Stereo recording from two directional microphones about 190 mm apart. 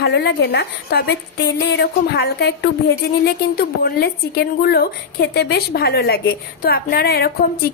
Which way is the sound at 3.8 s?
55° left (ahead or behind).